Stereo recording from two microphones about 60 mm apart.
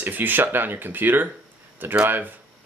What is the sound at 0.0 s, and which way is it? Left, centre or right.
Speech, right.